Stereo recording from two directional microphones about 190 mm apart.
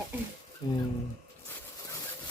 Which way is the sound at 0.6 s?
25° left (ahead or behind).